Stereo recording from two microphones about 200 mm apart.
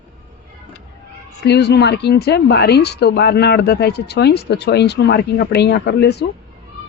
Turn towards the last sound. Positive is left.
turn(degrees=55)  # may be behind; listen again after turning